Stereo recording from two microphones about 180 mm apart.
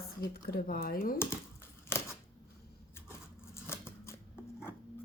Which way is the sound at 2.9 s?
15° left (ahead or behind).